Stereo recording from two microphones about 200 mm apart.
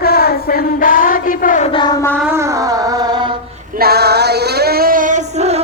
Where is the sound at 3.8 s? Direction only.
50° right (ahead or behind).